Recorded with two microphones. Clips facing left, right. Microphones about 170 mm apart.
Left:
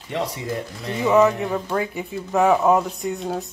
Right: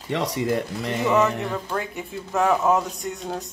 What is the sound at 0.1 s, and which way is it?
Speech, 80° right.